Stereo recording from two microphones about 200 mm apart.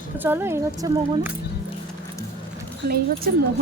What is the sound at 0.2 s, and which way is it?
Speech, 10° right (ahead or behind).